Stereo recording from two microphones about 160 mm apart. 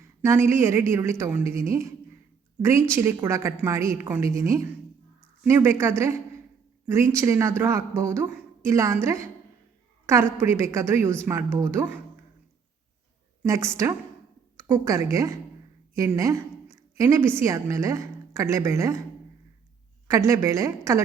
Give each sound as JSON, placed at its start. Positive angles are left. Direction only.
{"t": 0.2, "sound": "a woman's voice", "side_deg": -15}
{"t": 13.4, "sound": "a woman's voice", "side_deg": -20}
{"t": 14.7, "sound": "a woman's voice", "side_deg": -20}
{"t": 20.1, "sound": "a woman's voice", "side_deg": -20}